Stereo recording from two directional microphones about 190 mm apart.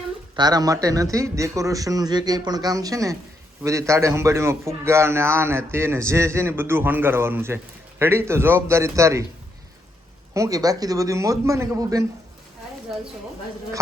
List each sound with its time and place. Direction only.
0.3 s a man's voice: 20° right (ahead or behind)
10.3 s a man's voice: 15° right (ahead or behind)